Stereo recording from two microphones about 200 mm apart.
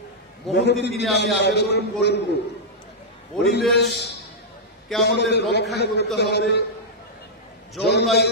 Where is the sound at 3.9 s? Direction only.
55° left (ahead or behind).